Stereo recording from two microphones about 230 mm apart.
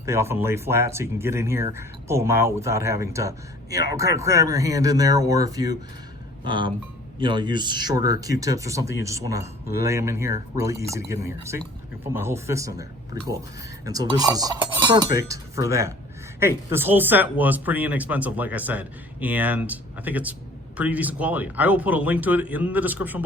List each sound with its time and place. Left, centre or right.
0.0 s speech: centre